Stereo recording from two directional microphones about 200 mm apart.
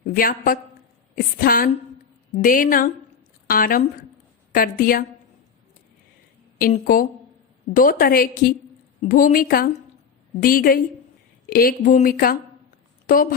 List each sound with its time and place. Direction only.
0.0 s a woman's voice: 45° left (ahead or behind)
6.6 s speech: 45° left (ahead or behind)